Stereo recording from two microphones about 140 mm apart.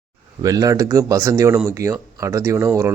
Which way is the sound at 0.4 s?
25° right (ahead or behind).